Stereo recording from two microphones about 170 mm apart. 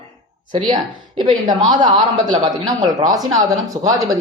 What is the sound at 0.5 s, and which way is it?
Speech, 25° right (ahead or behind).